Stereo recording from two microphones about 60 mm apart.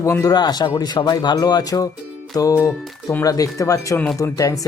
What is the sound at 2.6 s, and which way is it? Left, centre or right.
Speech, left.